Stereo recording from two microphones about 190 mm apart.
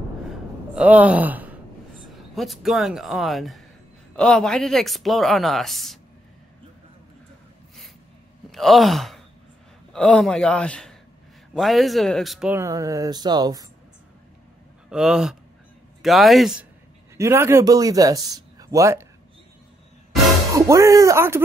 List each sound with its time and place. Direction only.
0.7 s speech: 10° right (ahead or behind)
8.5 s sigh: centre (ahead or behind)
9.9 s speech: 5° left (ahead or behind); by 13.7 s 20° right (ahead or behind)
14.9 s speech: 5° right (ahead or behind)
17.2 s speech: 15° right (ahead or behind)
20.5 s speech: 15° right (ahead or behind)